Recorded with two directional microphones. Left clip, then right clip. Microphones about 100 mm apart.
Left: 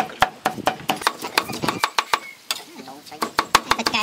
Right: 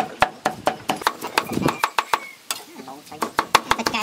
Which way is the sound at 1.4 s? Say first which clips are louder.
Right 1 dB; centre (ahead or behind).